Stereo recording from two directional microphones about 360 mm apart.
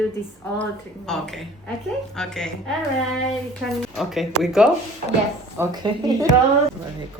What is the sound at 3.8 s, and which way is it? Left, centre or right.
Speech, centre.